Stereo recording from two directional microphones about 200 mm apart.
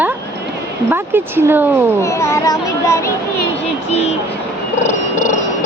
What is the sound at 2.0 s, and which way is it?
A child's voice, 15° left (ahead or behind).